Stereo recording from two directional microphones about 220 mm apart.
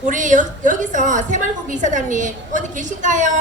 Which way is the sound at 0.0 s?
35° right (ahead or behind).